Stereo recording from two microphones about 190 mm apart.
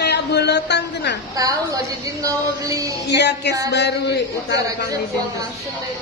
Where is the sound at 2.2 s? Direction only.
20° right (ahead or behind).